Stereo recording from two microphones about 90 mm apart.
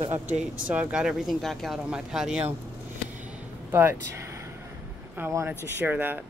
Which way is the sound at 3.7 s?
25° right (ahead or behind).